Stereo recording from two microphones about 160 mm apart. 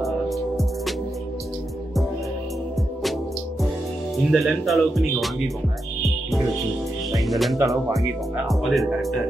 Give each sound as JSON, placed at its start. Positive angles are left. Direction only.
{"t": 0.0, "sound": "music", "side_deg": 0}
{"t": 4.3, "sound": "speech", "side_deg": 0}
{"t": 7.1, "sound": "speech", "side_deg": 0}
{"t": 7.5, "sound": "speech", "side_deg": -20}
{"t": 8.5, "sound": "speech", "side_deg": 0}